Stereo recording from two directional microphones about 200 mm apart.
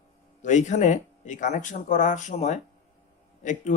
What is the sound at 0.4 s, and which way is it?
Speech, 35° left (ahead or behind).